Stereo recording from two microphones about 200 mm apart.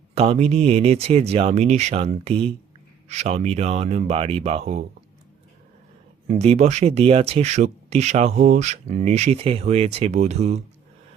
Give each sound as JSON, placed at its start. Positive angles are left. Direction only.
{"t": 0.1, "sound": "speech", "side_deg": -30}
{"t": 6.2, "sound": "speech", "side_deg": -35}